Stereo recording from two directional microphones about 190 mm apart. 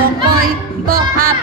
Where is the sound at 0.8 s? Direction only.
50° right (ahead or behind).